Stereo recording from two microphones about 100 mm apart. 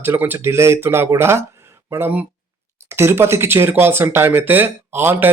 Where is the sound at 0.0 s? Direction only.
20° right (ahead or behind).